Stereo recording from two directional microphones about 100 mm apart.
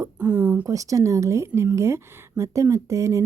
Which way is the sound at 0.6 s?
35° right (ahead or behind).